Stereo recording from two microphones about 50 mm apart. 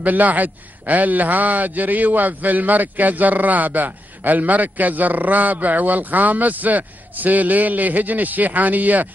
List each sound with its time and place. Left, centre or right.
0.0 s a man's voice: right